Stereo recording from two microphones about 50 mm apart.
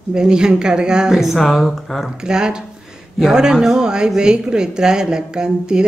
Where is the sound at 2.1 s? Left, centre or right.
Centre.